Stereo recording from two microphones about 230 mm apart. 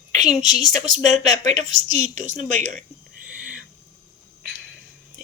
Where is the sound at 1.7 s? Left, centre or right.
Right.